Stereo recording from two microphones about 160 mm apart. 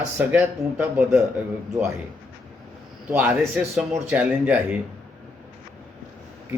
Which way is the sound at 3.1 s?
5° right (ahead or behind).